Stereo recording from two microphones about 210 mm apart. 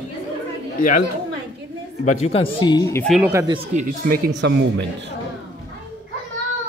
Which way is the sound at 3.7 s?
35° right (ahead or behind).